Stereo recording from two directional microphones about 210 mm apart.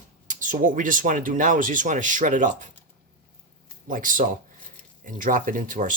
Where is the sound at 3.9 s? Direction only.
40° right (ahead or behind).